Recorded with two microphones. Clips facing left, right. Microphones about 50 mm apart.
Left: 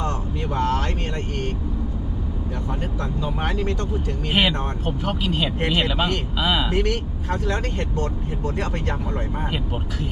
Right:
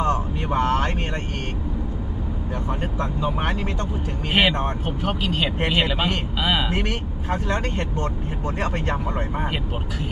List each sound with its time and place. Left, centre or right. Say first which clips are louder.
0.0 s vehicle: right 4 dB; right
2.6 s speech: right 3 dB; right
5.2 s speech: left 1 dB; centre
5.5 s speech: even; centre